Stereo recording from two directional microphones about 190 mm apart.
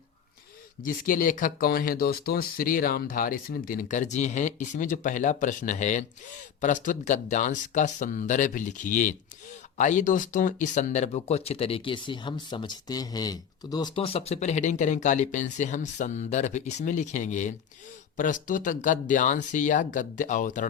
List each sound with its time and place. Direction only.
0.9 s speech: 45° left (ahead or behind)